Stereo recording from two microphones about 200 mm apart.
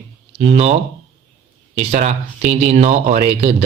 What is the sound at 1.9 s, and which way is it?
Speech, 35° right (ahead or behind).